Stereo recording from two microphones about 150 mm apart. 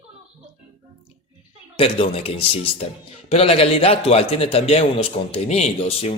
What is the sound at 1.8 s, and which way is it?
Speech, 40° left (ahead or behind).